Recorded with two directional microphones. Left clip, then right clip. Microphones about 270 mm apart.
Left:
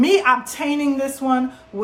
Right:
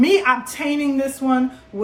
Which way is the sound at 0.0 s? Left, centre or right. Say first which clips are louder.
Even; centre.